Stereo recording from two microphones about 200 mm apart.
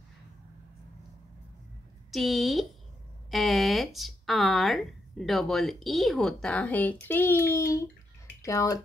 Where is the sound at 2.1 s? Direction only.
Centre (ahead or behind).